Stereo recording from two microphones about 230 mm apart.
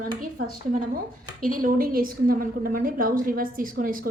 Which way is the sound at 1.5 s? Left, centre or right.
Right.